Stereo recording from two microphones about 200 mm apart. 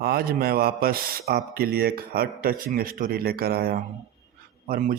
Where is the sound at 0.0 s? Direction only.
50° right (ahead or behind).